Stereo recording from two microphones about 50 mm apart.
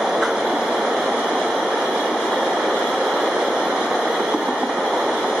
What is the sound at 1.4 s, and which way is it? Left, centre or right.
Train, centre.